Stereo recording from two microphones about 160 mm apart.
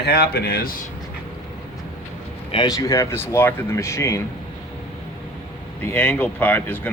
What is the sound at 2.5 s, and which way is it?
Speech, 25° left (ahead or behind).